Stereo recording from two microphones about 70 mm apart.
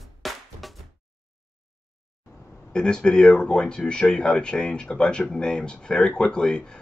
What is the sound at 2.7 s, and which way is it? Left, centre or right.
Speech, centre.